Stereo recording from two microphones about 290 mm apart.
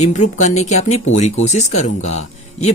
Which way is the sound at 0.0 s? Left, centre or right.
Left.